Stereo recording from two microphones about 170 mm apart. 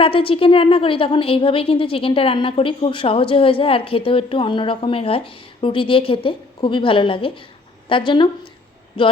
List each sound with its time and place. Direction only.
0.0 s a woman's voice: 30° left (ahead or behind)